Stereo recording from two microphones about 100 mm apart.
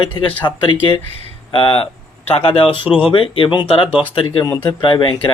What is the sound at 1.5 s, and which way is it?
Speech, 65° left (ahead or behind).